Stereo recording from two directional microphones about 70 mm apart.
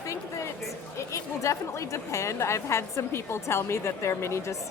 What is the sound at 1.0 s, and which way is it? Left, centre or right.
A woman's voice, left.